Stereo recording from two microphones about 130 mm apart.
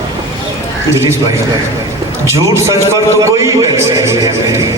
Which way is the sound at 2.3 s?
20° right (ahead or behind).